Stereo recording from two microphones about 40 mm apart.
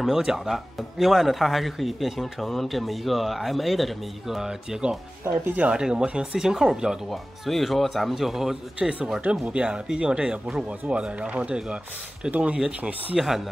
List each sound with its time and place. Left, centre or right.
0.2 s speech: centre
7.1 s speech: centre
8.1 s speech: centre
9.3 s speech: right
13.1 s speech: centre